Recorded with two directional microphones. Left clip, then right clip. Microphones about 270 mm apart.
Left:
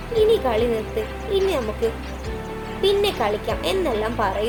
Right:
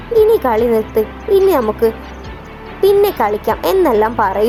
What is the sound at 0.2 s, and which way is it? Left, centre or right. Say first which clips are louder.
A woman's voice: right 7 dB; right.